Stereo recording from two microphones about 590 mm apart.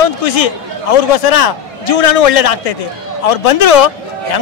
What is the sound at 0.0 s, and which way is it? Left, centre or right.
Speech, left.